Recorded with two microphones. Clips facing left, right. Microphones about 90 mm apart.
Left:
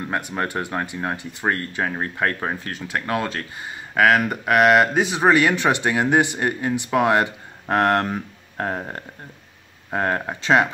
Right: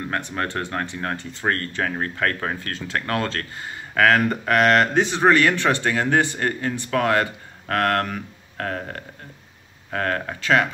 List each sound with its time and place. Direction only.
0.0 s speech: 15° left (ahead or behind)